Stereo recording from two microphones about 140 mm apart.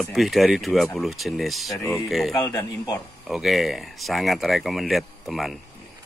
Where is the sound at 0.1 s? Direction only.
Centre (ahead or behind).